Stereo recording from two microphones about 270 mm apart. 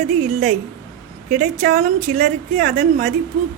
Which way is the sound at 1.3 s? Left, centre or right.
Right.